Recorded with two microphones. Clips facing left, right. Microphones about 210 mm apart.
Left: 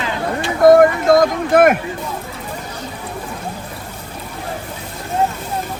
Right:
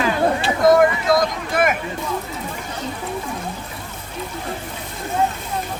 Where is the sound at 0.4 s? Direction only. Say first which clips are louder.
Left 6 dB; 50° left (ahead or behind).